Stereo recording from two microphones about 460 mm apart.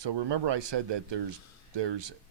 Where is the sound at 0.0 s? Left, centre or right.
Right.